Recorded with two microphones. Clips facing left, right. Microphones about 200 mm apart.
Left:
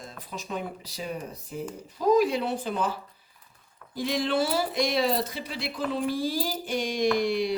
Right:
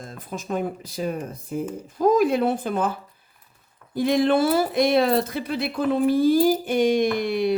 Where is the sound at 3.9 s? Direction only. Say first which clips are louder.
Right 7 dB; 55° right (ahead or behind).